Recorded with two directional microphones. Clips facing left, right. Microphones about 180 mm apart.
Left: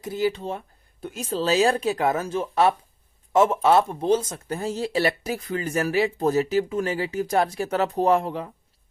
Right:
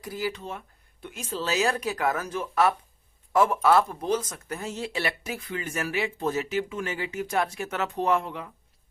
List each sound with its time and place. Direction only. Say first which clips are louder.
0.0 s speech: left 7 dB; 25° left (ahead or behind)